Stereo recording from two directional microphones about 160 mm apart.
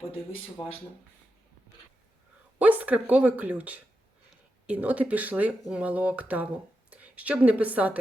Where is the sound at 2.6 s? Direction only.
10° right (ahead or behind).